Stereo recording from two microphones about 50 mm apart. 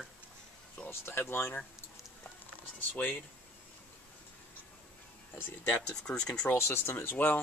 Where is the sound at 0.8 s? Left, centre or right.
Left.